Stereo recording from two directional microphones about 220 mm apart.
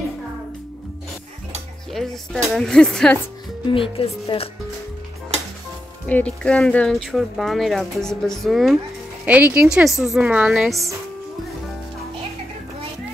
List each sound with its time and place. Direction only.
1.9 s speech: centre (ahead or behind)
3.6 s speech: 25° left (ahead or behind)
6.0 s speech: 5° left (ahead or behind)